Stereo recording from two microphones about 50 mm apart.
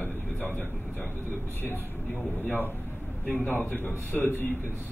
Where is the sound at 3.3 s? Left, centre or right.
Left.